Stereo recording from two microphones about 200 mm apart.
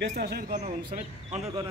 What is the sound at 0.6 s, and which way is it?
Speech, 35° right (ahead or behind).